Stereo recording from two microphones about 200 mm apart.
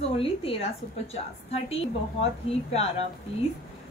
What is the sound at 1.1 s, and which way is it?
Speech, 30° left (ahead or behind).